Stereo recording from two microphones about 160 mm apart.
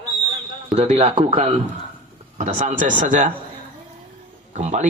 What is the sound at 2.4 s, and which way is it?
Speech, 50° right (ahead or behind).